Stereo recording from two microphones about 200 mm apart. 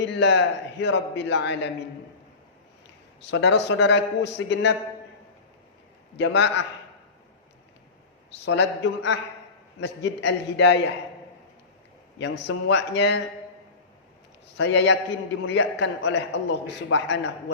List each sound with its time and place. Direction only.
0.0 s a man's voice: 60° left (ahead or behind)
3.2 s a man's voice: 65° left (ahead or behind)
6.1 s a man's voice: 60° left (ahead or behind)
8.4 s a man's voice: 60° left (ahead or behind)
12.2 s a man's voice: 60° left (ahead or behind)
14.5 s a man's voice: 60° left (ahead or behind)